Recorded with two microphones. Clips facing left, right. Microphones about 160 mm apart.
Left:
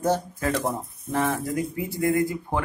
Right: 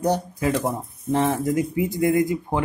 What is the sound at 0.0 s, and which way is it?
Speech, 15° right (ahead or behind).